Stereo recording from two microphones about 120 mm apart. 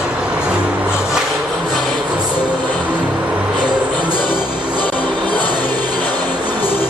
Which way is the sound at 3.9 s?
35° right (ahead or behind).